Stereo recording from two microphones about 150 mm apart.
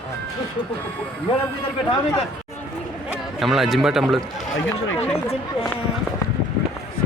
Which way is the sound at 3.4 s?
Centre (ahead or behind).